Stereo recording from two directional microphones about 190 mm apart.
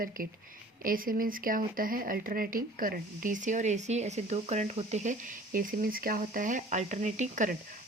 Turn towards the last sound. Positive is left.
turn(degrees=-40)  # may be behind; listen again after turning